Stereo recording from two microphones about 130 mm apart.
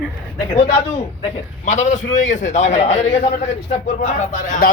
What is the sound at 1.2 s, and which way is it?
A man's voice, 65° left (ahead or behind).